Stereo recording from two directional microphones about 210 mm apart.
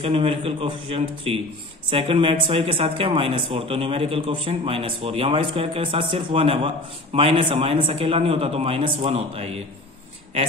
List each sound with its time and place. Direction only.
0.0 s speech: 25° right (ahead or behind)